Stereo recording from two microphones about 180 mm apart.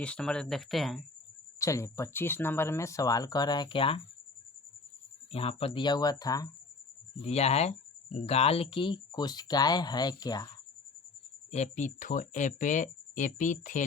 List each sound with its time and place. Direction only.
0.0 s speech: 5° left (ahead or behind)
1.5 s speech: 15° left (ahead or behind)
5.3 s speech: 35° left (ahead or behind)
7.3 s speech: 35° left (ahead or behind); by 10.5 s 20° left (ahead or behind)
11.5 s speech: 40° left (ahead or behind)